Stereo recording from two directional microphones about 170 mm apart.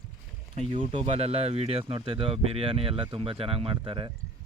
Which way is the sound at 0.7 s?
30° right (ahead or behind).